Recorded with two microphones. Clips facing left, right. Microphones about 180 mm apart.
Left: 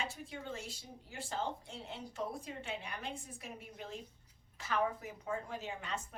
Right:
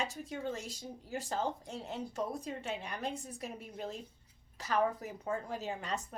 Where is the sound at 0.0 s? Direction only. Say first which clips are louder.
Right 5 dB; 40° right (ahead or behind).